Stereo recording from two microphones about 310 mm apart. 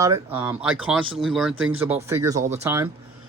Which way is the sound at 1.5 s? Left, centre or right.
Right.